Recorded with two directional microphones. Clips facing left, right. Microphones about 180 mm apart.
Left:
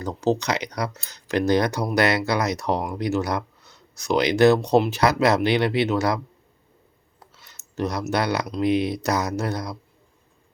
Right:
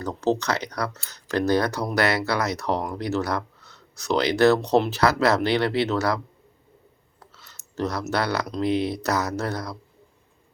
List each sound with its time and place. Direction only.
0.0 s speech: 10° left (ahead or behind)
7.2 s a sound: 15° left (ahead or behind)
8.6 s speech: 15° left (ahead or behind)